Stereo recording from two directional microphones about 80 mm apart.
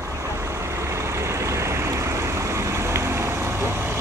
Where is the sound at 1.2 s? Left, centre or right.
Right.